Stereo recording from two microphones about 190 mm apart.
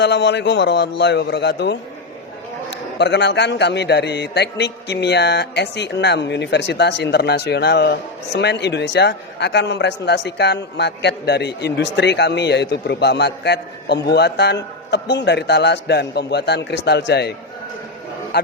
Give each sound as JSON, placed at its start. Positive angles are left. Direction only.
{"t": 0.0, "sound": "a man's voice", "side_deg": 65}